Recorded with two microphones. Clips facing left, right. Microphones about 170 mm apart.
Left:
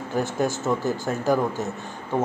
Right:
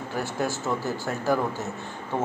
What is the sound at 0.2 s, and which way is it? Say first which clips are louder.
A man's voice: left 4 dB; 20° left (ahead or behind).